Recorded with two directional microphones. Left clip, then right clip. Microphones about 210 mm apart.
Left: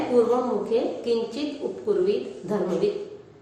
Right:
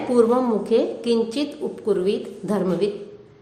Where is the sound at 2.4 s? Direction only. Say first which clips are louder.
Right 4 dB; 55° right (ahead or behind).